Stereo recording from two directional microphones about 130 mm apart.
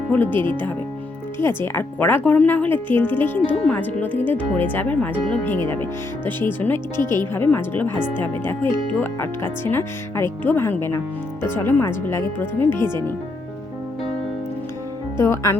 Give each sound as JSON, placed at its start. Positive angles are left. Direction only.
{"t": 0.1, "sound": "speech", "side_deg": 15}
{"t": 15.2, "sound": "speech", "side_deg": 20}